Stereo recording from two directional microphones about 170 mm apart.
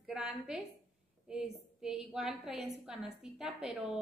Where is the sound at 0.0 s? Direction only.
5° right (ahead or behind).